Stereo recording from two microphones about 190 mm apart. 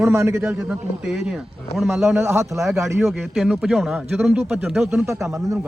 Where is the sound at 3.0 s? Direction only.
Centre (ahead or behind).